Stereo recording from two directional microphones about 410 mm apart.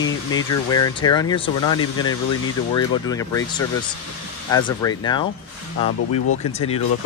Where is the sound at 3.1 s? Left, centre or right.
Centre.